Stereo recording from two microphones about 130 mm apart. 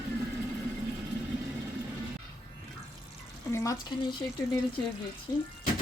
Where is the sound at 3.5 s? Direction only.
25° left (ahead or behind).